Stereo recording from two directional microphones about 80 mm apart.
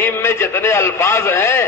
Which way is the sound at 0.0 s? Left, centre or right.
Left.